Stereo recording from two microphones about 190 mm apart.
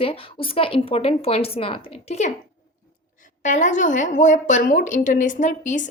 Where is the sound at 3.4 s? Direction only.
40° left (ahead or behind).